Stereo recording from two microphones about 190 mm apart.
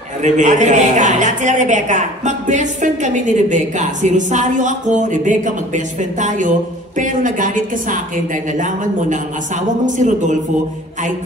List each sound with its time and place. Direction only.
0.2 s a woman's voice: 40° right (ahead or behind)